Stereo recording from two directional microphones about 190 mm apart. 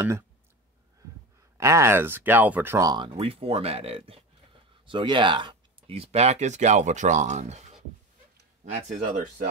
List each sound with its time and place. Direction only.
1.6 s speech: 15° right (ahead or behind); by 7.6 s 35° right (ahead or behind)
8.7 s speech: 40° right (ahead or behind)